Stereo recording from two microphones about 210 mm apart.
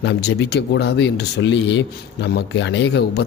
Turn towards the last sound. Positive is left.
turn(degrees=55)  # may be behind; listen again after turning